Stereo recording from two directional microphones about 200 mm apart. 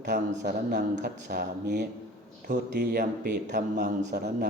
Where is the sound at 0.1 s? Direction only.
55° right (ahead or behind).